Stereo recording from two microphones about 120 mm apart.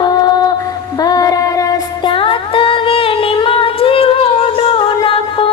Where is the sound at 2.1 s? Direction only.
45° left (ahead or behind).